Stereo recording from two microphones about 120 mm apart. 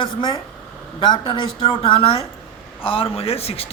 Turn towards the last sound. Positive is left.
turn(degrees=55)  # may be behind; listen again after turning